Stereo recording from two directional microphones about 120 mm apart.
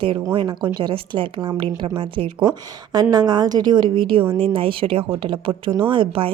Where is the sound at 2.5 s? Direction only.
35° right (ahead or behind).